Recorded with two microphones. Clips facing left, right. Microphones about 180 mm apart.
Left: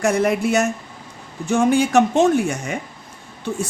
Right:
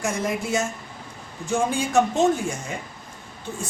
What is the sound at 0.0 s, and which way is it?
Speech, 65° left (ahead or behind).